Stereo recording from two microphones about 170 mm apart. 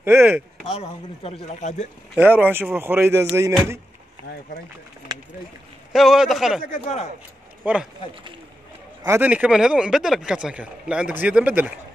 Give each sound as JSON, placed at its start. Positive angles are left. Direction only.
{"t": 0.0, "sound": "speech", "side_deg": -15}
{"t": 0.7, "sound": "speech", "side_deg": 35}
{"t": 2.1, "sound": "speech", "side_deg": -10}
{"t": 5.1, "sound": "a sound", "side_deg": -25}
{"t": 5.9, "sound": "a man's voice", "side_deg": 0}
{"t": 6.6, "sound": "speech", "side_deg": 50}
{"t": 7.6, "sound": "speech", "side_deg": -5}
{"t": 9.0, "sound": "speech", "side_deg": -15}